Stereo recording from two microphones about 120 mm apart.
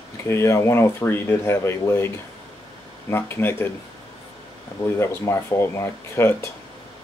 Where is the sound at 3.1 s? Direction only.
20° left (ahead or behind).